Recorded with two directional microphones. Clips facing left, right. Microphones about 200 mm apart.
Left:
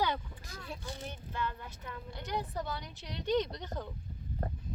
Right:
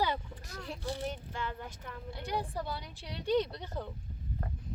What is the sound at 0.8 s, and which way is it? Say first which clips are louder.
Speech: right 6 dB; 30° right (ahead or behind).